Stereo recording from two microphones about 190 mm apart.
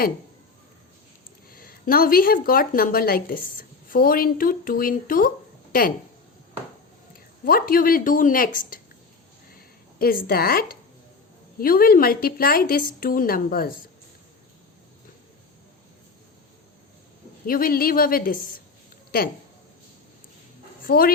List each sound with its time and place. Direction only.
1.5 s a woman's voice: 50° left (ahead or behind)
7.4 s a woman's voice: 50° left (ahead or behind)
10.0 s a woman's voice: 50° left (ahead or behind)
17.4 s a woman's voice: 50° left (ahead or behind)
20.8 s speech: 50° left (ahead or behind)